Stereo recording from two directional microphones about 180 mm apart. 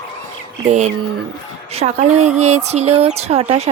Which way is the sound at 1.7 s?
40° right (ahead or behind).